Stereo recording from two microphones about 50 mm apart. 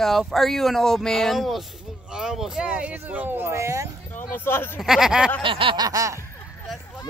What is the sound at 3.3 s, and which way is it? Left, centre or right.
Speech, right.